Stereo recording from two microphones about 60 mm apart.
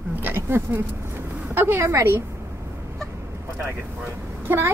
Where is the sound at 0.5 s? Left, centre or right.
Right.